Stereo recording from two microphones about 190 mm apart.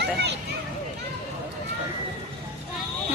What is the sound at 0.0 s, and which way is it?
Children playing, 60° right (ahead or behind).